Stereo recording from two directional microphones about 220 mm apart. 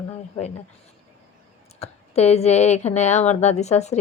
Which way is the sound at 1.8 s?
30° left (ahead or behind).